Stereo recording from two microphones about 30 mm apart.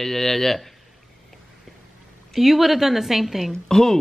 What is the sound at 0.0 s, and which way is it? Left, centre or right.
Speech, centre.